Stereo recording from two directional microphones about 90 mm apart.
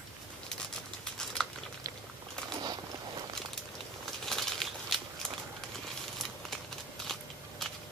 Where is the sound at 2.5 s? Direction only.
50° right (ahead or behind).